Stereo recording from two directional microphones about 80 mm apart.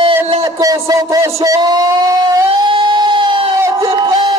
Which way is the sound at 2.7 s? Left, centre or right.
Right.